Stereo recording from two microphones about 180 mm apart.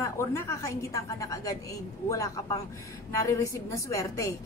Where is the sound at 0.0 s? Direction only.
15° left (ahead or behind).